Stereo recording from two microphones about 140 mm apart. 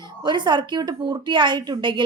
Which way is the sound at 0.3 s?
35° right (ahead or behind).